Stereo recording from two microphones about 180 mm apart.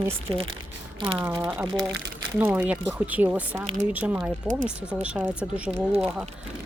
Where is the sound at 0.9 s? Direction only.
30° right (ahead or behind).